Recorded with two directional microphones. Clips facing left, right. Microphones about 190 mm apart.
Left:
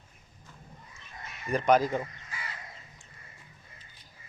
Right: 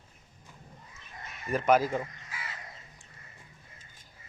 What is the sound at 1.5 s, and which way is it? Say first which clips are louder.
Speech: left 1 dB; 5° right (ahead or behind).